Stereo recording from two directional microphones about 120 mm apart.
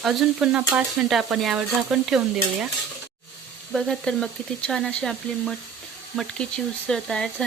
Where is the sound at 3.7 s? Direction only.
Centre (ahead or behind).